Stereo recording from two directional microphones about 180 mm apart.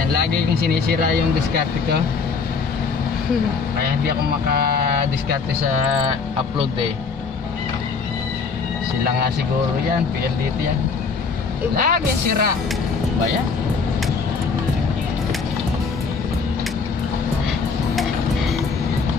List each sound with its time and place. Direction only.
4.0 s speech: 60° right (ahead or behind)
11.7 s speech: 55° right (ahead or behind)